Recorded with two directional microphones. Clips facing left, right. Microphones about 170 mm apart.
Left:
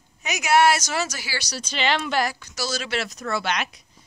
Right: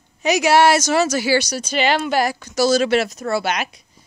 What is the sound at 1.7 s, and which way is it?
Speech, 45° right (ahead or behind).